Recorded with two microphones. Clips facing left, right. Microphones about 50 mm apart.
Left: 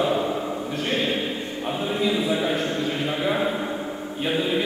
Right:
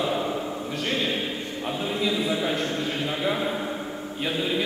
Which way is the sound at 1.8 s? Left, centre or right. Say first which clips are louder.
Left 3 dB; left.